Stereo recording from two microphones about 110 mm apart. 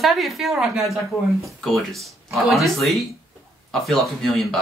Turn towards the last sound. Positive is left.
turn(degrees=0)  # may be behind; listen again after turning